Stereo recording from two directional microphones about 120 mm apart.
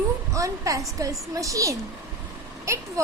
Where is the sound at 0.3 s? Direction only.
25° right (ahead or behind).